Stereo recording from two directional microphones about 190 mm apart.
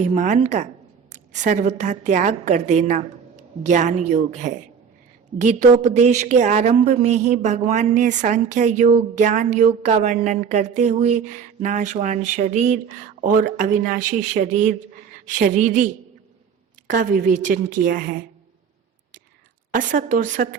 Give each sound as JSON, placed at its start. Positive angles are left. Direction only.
{"t": 0.0, "sound": "a woman's voice", "side_deg": -40}
{"t": 19.7, "sound": "speech", "side_deg": -45}